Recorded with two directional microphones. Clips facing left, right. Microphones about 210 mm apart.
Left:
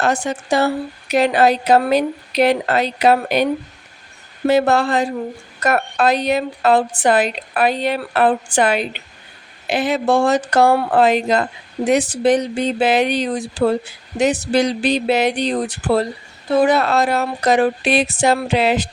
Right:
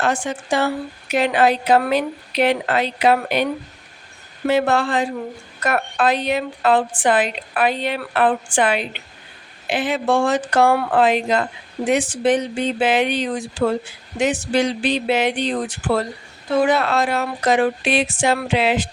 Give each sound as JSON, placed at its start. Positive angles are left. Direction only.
{"t": 0.0, "sound": "a woman's voice", "side_deg": 40}
{"t": 4.4, "sound": "a woman's voice", "side_deg": 40}